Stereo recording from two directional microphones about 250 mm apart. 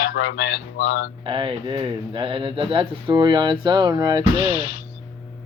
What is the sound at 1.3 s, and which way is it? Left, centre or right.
Speech, centre.